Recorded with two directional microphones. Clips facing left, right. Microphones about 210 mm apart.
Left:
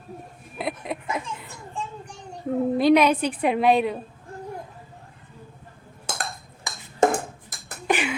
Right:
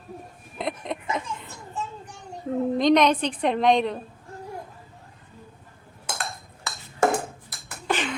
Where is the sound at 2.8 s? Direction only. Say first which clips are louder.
Left 1 dB; 5° left (ahead or behind).